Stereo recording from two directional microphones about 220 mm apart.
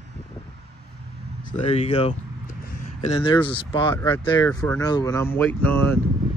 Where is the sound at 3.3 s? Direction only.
20° left (ahead or behind).